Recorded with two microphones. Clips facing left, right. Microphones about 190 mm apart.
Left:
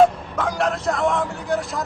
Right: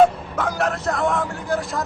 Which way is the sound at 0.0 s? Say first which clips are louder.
Even; centre (ahead or behind).